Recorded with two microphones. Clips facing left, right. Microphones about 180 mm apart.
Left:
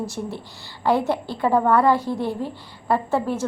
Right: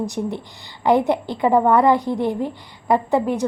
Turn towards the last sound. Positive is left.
turn(degrees=-15)  # may be behind; listen again after turning